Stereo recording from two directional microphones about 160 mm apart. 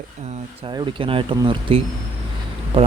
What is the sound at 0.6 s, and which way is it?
Speech, 30° right (ahead or behind).